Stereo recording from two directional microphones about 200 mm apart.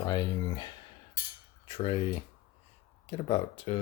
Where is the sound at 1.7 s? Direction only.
25° left (ahead or behind).